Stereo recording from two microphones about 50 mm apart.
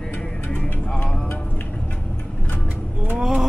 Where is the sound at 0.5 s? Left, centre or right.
Left.